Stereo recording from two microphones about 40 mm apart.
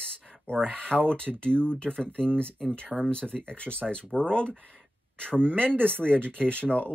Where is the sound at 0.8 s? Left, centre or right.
Left.